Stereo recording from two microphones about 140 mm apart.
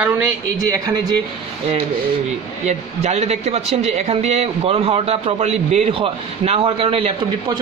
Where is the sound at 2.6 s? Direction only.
50° right (ahead or behind).